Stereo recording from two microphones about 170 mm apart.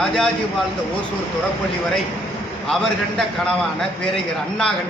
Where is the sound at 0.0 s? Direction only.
5° left (ahead or behind).